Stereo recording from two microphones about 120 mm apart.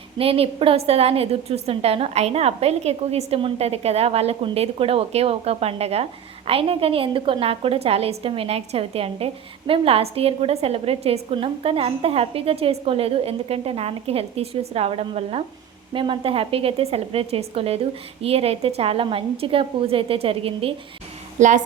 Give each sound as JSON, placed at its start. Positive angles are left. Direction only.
{"t": 0.2, "sound": "a woman's voice", "side_deg": -50}
{"t": 15.9, "sound": "a woman's voice", "side_deg": -45}
{"t": 21.3, "sound": "a woman's voice", "side_deg": -90}